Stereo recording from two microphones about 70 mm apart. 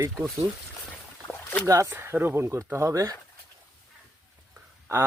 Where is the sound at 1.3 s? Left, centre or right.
Left.